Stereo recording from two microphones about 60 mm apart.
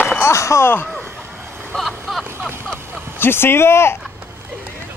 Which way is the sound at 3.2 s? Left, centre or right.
Left.